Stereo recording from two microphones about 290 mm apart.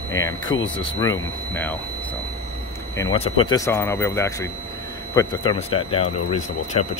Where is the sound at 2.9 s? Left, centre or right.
Centre.